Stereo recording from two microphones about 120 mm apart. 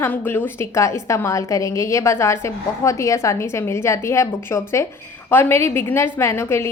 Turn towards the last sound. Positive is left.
turn(degrees=20)  # may be behind; listen again after turning